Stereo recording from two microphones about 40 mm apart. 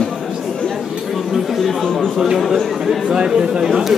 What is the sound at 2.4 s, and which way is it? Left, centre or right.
Speech, centre.